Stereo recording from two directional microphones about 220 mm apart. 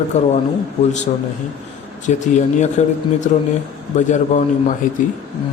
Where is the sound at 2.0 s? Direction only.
35° left (ahead or behind).